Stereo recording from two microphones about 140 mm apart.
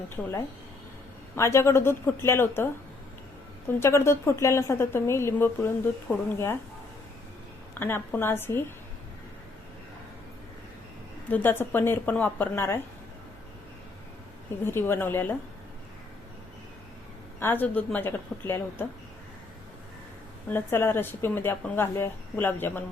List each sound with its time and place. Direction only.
0.2 s speech: centre (ahead or behind)
1.4 s speech: 20° left (ahead or behind)
3.8 s a woman's voice: 20° left (ahead or behind)
7.8 s speech: 15° left (ahead or behind)
11.3 s speech: 10° left (ahead or behind)
14.6 s speech: 15° left (ahead or behind)
17.4 s speech: 15° left (ahead or behind)
20.5 s speech: 15° left (ahead or behind)